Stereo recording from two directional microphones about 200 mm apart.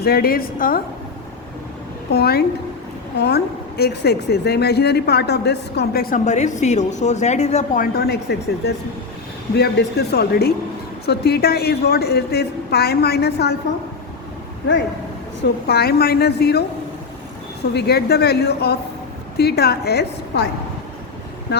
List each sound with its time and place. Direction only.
0.0 s a woman's voice: 50° left (ahead or behind)
2.1 s a woman's voice: 55° left (ahead or behind); by 7.9 s 35° left (ahead or behind)
7.9 s a woman's voice: 50° left (ahead or behind)
15.6 s a woman's voice: 50° left (ahead or behind)
17.7 s a woman's voice: 55° left (ahead or behind)